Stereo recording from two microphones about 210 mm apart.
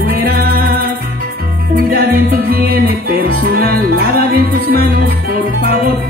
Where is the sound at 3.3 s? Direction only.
45° right (ahead or behind).